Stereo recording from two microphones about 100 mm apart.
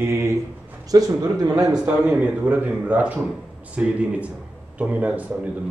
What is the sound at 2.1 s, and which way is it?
A man's voice, 15° right (ahead or behind).